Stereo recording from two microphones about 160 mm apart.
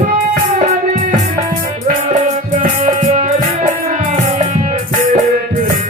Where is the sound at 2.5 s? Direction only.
50° right (ahead or behind).